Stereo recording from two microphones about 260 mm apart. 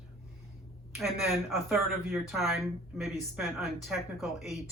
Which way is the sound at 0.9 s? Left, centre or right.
Centre.